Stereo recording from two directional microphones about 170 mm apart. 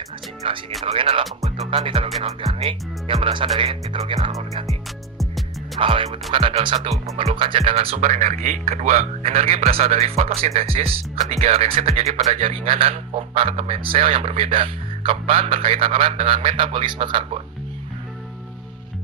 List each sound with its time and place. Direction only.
0.4 s speech: 35° right (ahead or behind)
1.5 s music: 35° right (ahead or behind)
2.2 s speech: 35° right (ahead or behind)
5.8 s speech: 30° right (ahead or behind)